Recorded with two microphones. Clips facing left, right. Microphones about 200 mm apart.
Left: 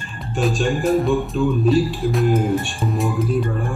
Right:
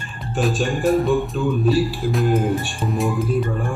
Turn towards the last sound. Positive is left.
turn(degrees=0)  # may be behind; listen again after turning